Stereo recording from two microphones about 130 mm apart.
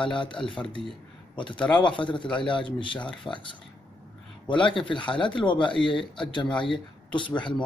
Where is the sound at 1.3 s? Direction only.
40° left (ahead or behind).